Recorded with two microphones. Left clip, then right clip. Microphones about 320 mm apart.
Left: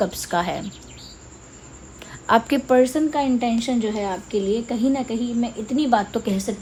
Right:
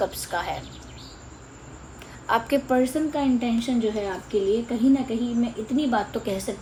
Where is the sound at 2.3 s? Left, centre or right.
Left.